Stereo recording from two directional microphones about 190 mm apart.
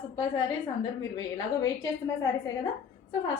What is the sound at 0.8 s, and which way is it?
Speech, 20° left (ahead or behind).